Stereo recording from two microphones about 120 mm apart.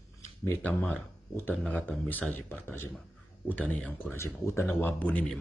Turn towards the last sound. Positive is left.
turn(degrees=10)  # may be behind; listen again after turning